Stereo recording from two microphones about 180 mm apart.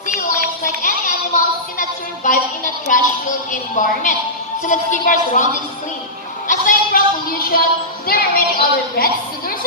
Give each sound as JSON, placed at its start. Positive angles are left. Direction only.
{"t": 0.8, "sound": "a sound", "side_deg": 45}
{"t": 2.3, "sound": "music", "side_deg": 45}
{"t": 3.5, "sound": "a woman's voice", "side_deg": 45}
{"t": 6.5, "sound": "music", "side_deg": 50}
{"t": 8.0, "sound": "a woman's voice", "side_deg": 55}